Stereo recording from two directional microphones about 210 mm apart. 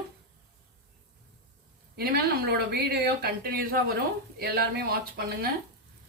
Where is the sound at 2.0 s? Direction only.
45° right (ahead or behind).